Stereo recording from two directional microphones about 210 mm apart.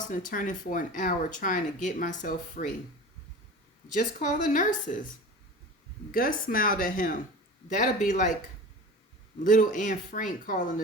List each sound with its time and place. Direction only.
0.0 s speech: 40° left (ahead or behind)
3.9 s speech: 35° left (ahead or behind)
6.1 s speech: 40° left (ahead or behind)
9.4 s speech: 40° left (ahead or behind)